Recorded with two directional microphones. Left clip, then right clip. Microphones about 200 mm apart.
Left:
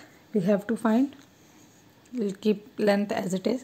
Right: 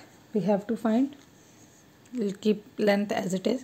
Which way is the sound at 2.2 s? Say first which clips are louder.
Left 1 dB; centre (ahead or behind).